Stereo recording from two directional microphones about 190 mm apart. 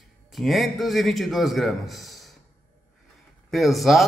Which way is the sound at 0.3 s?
Centre (ahead or behind).